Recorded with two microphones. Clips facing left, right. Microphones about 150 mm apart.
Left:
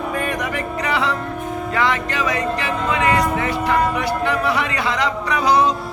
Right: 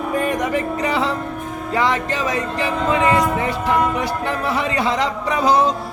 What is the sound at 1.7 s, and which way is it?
A capella, 35° right (ahead or behind).